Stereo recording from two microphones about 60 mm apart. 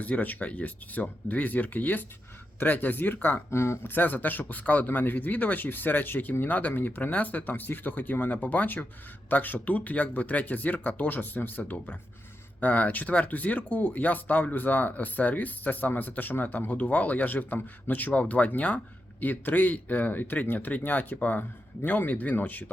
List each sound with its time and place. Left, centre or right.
0.0 s speech: left
3.5 s speech: left
3.8 s speech: left